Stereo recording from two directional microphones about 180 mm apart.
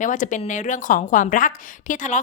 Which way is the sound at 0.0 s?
45° left (ahead or behind).